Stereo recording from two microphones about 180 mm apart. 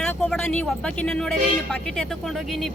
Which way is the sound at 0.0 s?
5° left (ahead or behind).